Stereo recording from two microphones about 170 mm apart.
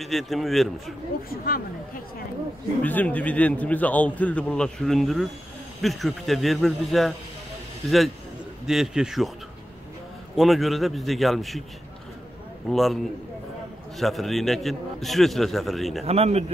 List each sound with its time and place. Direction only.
0.0 s a man's voice: centre (ahead or behind)
1.3 s speech: 60° left (ahead or behind)
2.8 s a man's voice: 10° left (ahead or behind)
8.6 s a man's voice: 5° right (ahead or behind)
10.3 s a man's voice: centre (ahead or behind)
12.6 s a man's voice: centre (ahead or behind)
16.1 s speech: 40° right (ahead or behind)